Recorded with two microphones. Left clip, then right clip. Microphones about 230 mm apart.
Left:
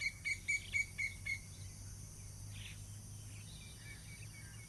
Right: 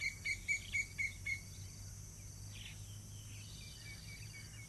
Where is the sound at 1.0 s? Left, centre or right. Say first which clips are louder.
Even; left.